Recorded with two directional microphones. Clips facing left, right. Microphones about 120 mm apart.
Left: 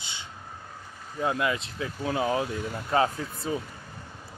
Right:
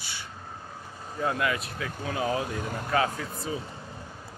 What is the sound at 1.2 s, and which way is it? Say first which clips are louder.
Speech: left 1 dB; 25° left (ahead or behind).